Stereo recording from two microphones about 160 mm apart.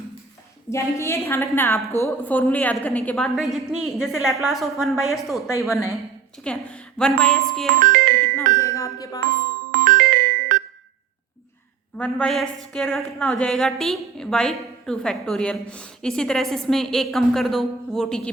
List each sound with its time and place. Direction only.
0.7 s a woman's voice: 15° left (ahead or behind); by 7.7 s centre (ahead or behind)
7.8 s music: 60° right (ahead or behind)
8.5 s speech: 20° left (ahead or behind)
9.7 s music: 60° right (ahead or behind)
11.9 s a woman's voice: 5° left (ahead or behind)